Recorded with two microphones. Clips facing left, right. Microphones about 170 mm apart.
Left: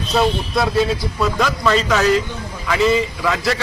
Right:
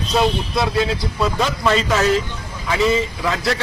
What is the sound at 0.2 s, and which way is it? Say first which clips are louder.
Speech: left 1 dB; centre (ahead or behind).